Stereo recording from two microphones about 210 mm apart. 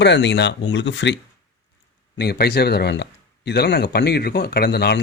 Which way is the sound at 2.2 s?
50° left (ahead or behind).